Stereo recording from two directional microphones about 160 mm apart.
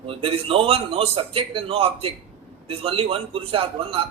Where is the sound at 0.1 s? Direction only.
35° right (ahead or behind).